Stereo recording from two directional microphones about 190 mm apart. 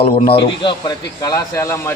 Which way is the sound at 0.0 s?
30° left (ahead or behind).